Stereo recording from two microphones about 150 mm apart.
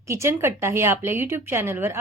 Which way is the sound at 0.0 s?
20° right (ahead or behind).